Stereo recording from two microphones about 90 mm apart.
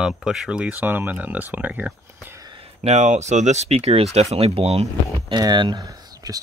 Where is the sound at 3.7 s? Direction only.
90° right.